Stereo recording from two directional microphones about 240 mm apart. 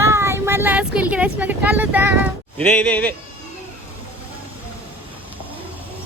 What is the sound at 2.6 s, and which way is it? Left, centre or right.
Speech, centre.